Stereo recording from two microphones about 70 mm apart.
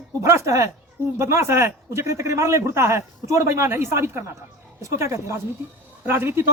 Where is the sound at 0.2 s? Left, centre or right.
Right.